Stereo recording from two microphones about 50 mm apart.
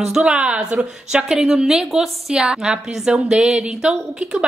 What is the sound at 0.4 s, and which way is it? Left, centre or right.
Speech, right.